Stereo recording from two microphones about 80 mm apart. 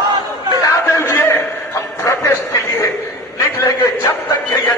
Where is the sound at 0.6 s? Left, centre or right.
Left.